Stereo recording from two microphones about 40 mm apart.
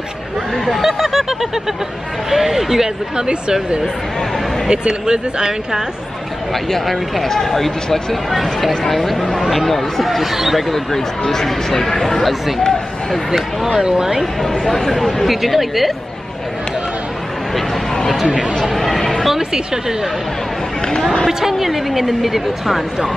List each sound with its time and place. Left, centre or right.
0.8 s snicker: centre
2.3 s a woman's voice: centre
3.2 s speech: right
4.6 s a woman's voice: centre
6.5 s speech: centre
10.7 s speech: centre
13.7 s a woman's voice: centre
14.4 s speech: centre
18.7 s a sound: centre
19.2 s a woman's voice: centre
21.3 s a woman's voice: centre